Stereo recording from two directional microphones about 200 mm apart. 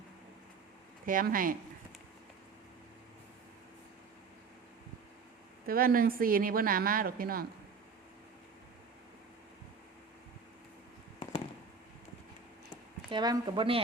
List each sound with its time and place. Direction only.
1.0 s a woman's voice: 45° right (ahead or behind)
5.6 s a woman's voice: 45° right (ahead or behind)
11.2 s fireworks: 30° left (ahead or behind)
13.1 s speech: 20° right (ahead or behind)